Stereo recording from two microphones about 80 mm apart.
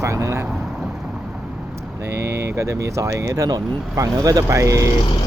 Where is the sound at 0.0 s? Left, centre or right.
Right.